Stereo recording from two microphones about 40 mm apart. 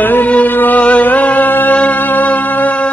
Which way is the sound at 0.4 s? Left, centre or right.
Left.